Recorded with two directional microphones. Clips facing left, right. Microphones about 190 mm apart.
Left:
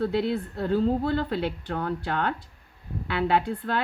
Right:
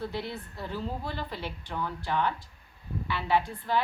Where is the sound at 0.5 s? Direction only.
60° left (ahead or behind).